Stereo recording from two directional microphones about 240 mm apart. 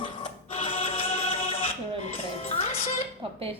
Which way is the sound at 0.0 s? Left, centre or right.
Left.